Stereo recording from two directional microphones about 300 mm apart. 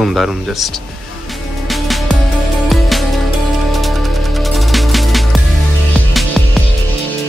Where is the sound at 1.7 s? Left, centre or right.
Centre.